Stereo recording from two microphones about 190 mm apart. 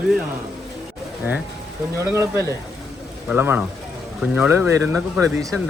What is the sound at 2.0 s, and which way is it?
Speech, 15° right (ahead or behind).